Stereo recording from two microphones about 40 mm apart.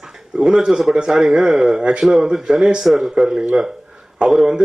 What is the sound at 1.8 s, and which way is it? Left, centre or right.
Speech, right.